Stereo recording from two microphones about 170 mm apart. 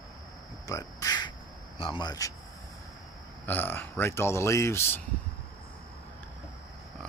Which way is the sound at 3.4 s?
10° left (ahead or behind).